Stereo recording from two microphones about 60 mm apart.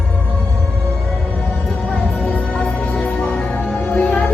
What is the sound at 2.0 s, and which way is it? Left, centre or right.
Music, left.